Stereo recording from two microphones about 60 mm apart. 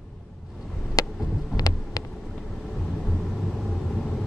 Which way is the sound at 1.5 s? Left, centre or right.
Left.